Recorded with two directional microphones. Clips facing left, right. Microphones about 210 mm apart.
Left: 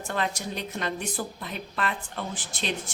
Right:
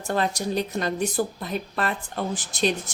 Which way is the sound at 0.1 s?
40° right (ahead or behind).